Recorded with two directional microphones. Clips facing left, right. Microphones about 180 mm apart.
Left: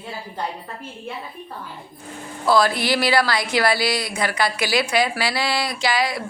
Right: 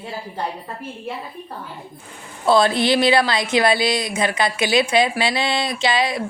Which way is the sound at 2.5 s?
25° right (ahead or behind).